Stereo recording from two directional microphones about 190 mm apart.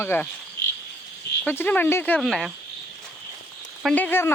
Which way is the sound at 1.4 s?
10° left (ahead or behind).